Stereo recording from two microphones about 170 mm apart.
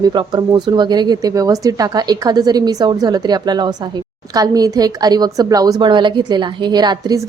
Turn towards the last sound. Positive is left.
turn(degrees=-25)  # may be behind; listen again after turning